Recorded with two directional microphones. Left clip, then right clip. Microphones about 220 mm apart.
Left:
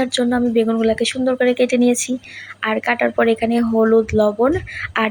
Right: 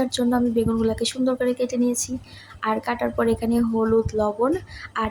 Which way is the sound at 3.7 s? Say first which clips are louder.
Left 8 dB; 20° left (ahead or behind).